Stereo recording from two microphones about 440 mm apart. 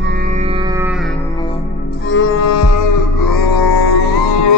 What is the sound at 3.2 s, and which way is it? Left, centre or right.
Music, left.